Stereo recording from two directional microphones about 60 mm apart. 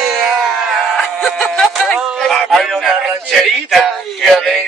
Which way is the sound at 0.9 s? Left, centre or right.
Centre.